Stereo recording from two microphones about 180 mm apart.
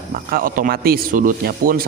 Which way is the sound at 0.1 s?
55° right (ahead or behind).